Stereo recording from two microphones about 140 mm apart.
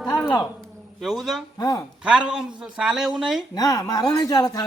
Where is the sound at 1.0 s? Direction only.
Centre (ahead or behind).